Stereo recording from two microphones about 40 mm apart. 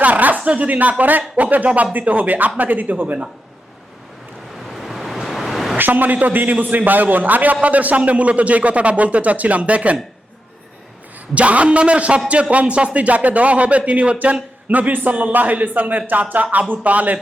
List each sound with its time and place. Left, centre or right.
0.0 s a man's voice: right
4.7 s waves: centre
5.7 s a man's voice: right
11.3 s a man's voice: right
14.7 s a man's voice: right